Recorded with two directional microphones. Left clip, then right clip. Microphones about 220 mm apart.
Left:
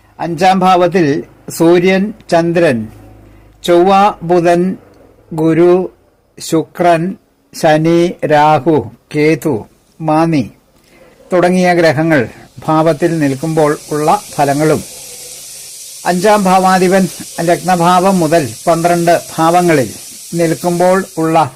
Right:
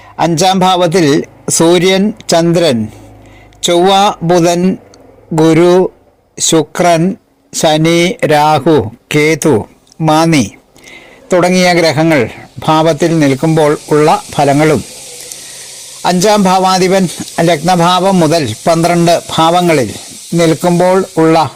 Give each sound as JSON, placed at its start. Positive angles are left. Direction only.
{"t": 0.2, "sound": "speech", "side_deg": -20}
{"t": 16.0, "sound": "speech", "side_deg": -20}